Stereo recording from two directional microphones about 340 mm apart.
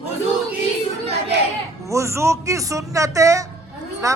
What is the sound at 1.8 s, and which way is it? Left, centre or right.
A man's voice, centre.